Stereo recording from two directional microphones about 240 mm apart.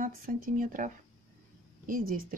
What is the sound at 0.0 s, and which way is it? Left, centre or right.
Speech, right.